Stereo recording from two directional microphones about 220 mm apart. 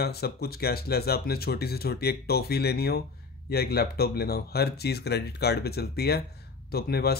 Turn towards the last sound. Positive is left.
turn(degrees=45)  # may be behind; listen again after turning